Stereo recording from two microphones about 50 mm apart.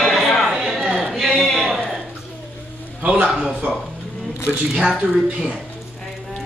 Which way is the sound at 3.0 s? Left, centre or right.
Right.